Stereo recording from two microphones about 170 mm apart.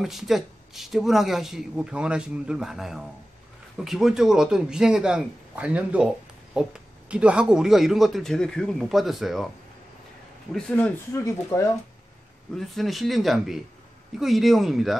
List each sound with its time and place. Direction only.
0.0 s speech: centre (ahead or behind)
11.1 s speech: 15° left (ahead or behind)
12.5 s speech: centre (ahead or behind)